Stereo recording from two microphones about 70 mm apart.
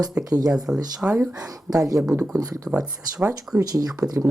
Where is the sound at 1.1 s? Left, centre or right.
Right.